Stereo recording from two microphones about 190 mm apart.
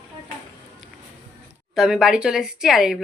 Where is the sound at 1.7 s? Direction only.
5° right (ahead or behind).